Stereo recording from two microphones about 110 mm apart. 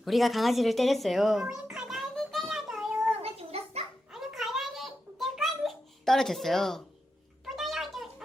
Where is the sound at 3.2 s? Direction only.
65° right (ahead or behind).